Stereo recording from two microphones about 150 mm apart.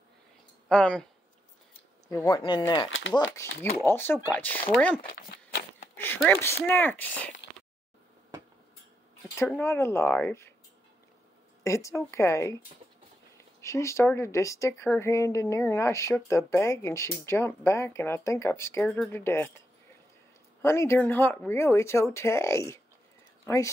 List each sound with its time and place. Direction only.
0.7 s speech: 5° left (ahead or behind)
2.0 s speech: 20° left (ahead or behind)
2.3 s speech: 30° left (ahead or behind)
3.1 s speech: 15° left (ahead or behind)
6.0 s speech: 15° left (ahead or behind)
9.6 s speech: 15° left (ahead or behind)
11.6 s speech: 20° left (ahead or behind)
13.6 s speech: 20° left (ahead or behind)
20.6 s speech: 15° left (ahead or behind)